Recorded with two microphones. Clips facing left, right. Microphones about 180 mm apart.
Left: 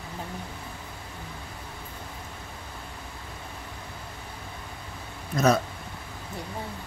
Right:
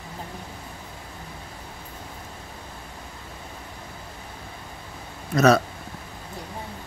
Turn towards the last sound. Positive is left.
turn(degrees=-75)  # may be behind; listen again after turning